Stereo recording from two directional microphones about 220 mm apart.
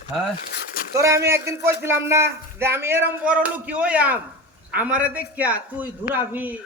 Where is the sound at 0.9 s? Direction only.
15° right (ahead or behind).